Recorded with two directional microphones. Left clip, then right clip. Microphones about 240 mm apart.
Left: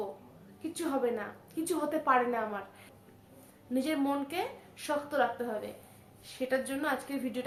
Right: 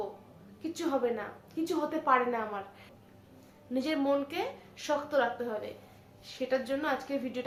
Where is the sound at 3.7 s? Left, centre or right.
Centre.